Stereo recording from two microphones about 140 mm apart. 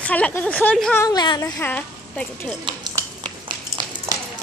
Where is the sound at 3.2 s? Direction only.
35° right (ahead or behind).